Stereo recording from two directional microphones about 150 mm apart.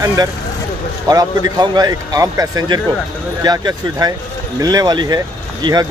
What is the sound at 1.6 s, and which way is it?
Speech, 30° right (ahead or behind).